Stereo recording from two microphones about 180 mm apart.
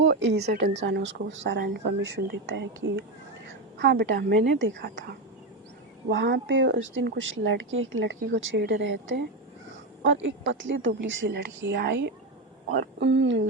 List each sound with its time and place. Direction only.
0.1 s speech: 70° right (ahead or behind); by 13.5 s 90° right